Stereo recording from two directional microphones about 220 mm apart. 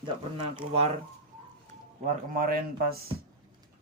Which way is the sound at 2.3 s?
40° right (ahead or behind).